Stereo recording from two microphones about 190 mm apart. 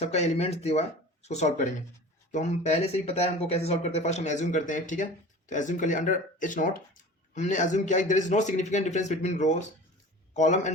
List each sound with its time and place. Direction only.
0.0 s speech: 35° left (ahead or behind)